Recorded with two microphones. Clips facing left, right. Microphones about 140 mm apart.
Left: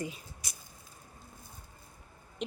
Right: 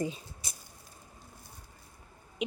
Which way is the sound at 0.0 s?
30° right (ahead or behind).